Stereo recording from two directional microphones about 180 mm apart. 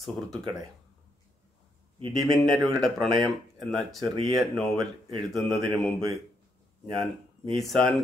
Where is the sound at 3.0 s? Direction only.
25° right (ahead or behind).